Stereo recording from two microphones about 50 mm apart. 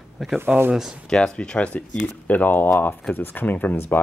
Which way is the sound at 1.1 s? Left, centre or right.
Centre.